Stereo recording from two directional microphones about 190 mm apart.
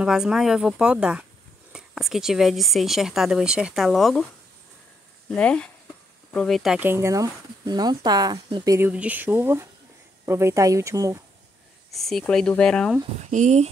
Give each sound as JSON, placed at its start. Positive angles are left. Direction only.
{"t": 0.0, "sound": "speech", "side_deg": -5}
{"t": 5.3, "sound": "speech", "side_deg": 5}
{"t": 8.7, "sound": "speech", "side_deg": -10}
{"t": 11.9, "sound": "speech", "side_deg": 0}
{"t": 13.3, "sound": "speech", "side_deg": -40}